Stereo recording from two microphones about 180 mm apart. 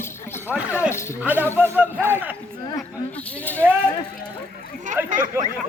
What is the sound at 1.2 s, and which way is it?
Speech, 10° right (ahead or behind).